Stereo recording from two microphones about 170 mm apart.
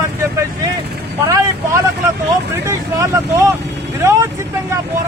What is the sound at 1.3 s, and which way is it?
Speech, 20° right (ahead or behind).